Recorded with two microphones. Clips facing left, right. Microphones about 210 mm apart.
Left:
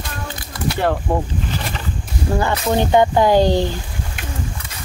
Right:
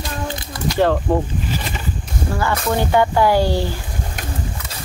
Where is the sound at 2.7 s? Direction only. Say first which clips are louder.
Left 3 dB; 20° left (ahead or behind).